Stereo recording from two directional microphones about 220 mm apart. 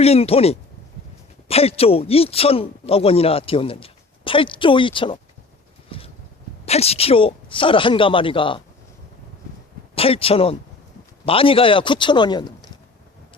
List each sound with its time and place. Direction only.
0.0 s a man's voice: 25° left (ahead or behind)
5.9 s a sound: 25° left (ahead or behind)
6.7 s a man's voice: 30° left (ahead or behind)
9.9 s a man's voice: 25° left (ahead or behind)